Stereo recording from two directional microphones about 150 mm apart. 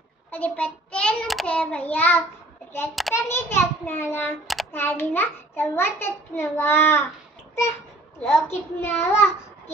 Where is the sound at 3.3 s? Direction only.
15° left (ahead or behind).